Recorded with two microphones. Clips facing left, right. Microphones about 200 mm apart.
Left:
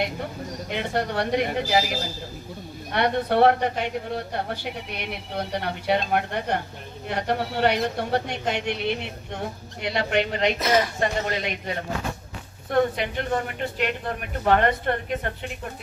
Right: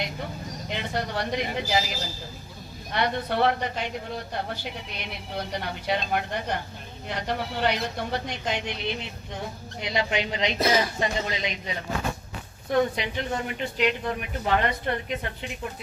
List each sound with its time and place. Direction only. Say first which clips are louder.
0.7 s speech: left 4 dB; 60° left (ahead or behind)
4.9 s speech: left 3 dB; 60° left (ahead or behind)